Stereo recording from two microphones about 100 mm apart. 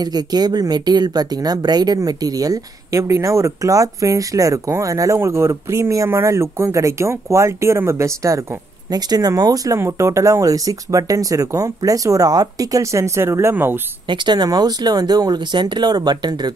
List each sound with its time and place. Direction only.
0.0 s speech: 45° right (ahead or behind)
8.9 s speech: 40° right (ahead or behind); by 13.7 s 20° right (ahead or behind)
14.0 s speech: 50° right (ahead or behind)